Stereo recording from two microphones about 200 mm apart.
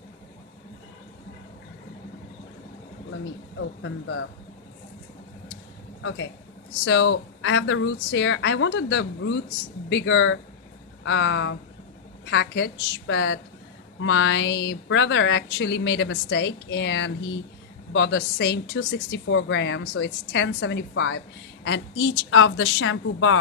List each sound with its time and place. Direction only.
3.5 s speech: 80° left
6.8 s a woman's voice: 65° left (ahead or behind); by 23.4 s 90° left